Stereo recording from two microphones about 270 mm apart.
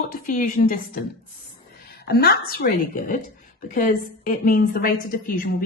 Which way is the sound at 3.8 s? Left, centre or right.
Left.